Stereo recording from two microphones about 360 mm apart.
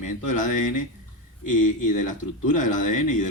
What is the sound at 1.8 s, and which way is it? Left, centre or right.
Speech, left.